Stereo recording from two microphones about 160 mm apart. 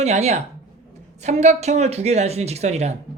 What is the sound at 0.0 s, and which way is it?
Speech, 45° right (ahead or behind).